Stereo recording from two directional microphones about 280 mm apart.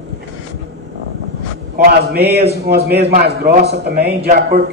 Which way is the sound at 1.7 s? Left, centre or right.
Right.